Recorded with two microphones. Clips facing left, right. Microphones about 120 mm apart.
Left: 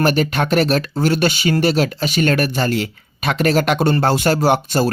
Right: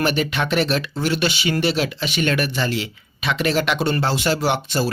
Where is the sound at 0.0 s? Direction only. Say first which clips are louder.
Left 4 dB; 45° left (ahead or behind).